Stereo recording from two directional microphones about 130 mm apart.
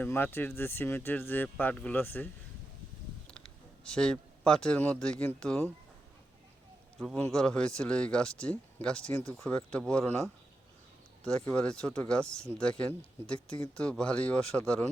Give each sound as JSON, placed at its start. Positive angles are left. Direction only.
{"t": 0.0, "sound": "speech", "side_deg": 15}
{"t": 3.8, "sound": "speech", "side_deg": 5}
{"t": 7.3, "sound": "speech", "side_deg": 5}
{"t": 10.0, "sound": "speech", "side_deg": 20}
{"t": 11.2, "sound": "speech", "side_deg": 5}